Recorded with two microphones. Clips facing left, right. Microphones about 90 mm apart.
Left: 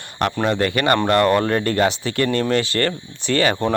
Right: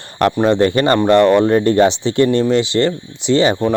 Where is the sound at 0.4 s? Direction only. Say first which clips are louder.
Right 5 dB; 30° right (ahead or behind).